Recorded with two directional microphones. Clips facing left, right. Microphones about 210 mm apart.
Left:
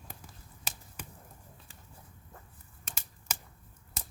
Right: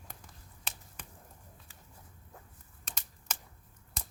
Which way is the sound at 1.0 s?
5° left (ahead or behind).